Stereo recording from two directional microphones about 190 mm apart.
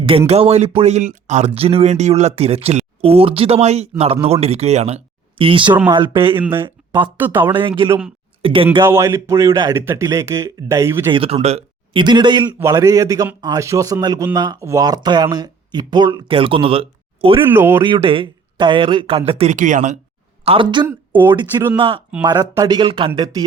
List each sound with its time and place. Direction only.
0.0 s speech: 30° right (ahead or behind)
6.4 s speech: 10° right (ahead or behind)
6.7 s a sound: 25° right (ahead or behind)
7.9 s speech: 10° right (ahead or behind)
8.4 s speech: 30° right (ahead or behind)
8.8 s speech: 15° right (ahead or behind)
11.1 s speech: 30° right (ahead or behind)
17.5 s speech: 10° right (ahead or behind)
17.8 s speech: 25° right (ahead or behind); by 20.0 s 40° right (ahead or behind)
20.4 s speech: 30° right (ahead or behind)
20.8 s speech: 10° right (ahead or behind)
21.8 s speech: 30° right (ahead or behind)